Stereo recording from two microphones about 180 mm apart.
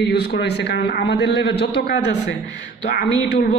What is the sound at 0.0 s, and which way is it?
A man's voice, 70° left (ahead or behind).